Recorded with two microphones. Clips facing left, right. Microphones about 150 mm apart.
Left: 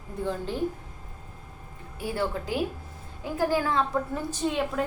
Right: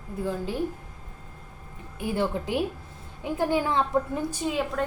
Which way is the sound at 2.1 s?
20° right (ahead or behind).